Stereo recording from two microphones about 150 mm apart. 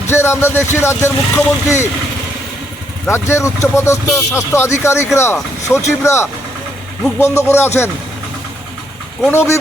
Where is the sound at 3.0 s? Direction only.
20° left (ahead or behind).